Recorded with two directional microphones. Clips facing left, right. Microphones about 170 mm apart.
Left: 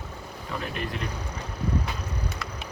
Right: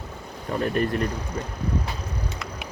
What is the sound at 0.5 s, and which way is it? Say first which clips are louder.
Speech: right 9 dB; 45° right (ahead or behind).